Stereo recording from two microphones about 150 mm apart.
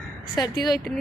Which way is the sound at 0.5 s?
Centre (ahead or behind).